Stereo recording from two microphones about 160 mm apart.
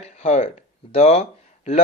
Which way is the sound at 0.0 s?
45° left (ahead or behind).